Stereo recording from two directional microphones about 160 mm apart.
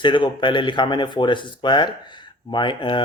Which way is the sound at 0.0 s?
30° left (ahead or behind).